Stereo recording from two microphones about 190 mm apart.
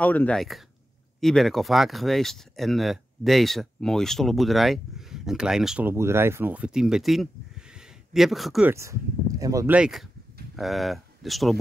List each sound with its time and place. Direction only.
0.0 s speech: 10° left (ahead or behind)
9.4 s speech: 15° right (ahead or behind)
9.8 s speech: centre (ahead or behind)